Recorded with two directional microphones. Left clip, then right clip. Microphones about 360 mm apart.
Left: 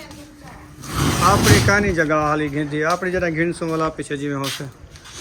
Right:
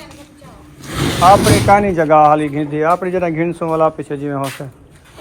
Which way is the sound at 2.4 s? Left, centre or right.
Right.